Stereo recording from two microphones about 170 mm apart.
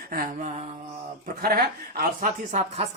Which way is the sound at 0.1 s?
55° right (ahead or behind).